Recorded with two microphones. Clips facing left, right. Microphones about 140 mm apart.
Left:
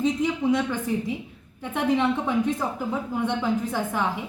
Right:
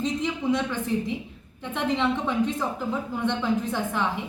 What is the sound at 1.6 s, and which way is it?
A woman's voice, 10° left (ahead or behind).